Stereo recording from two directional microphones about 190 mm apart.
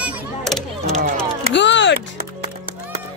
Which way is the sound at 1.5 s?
70° left (ahead or behind).